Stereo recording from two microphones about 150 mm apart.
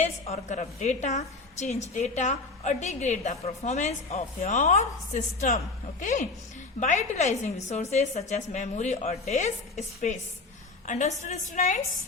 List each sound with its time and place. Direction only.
0.3 s a woman's voice: 50° left (ahead or behind)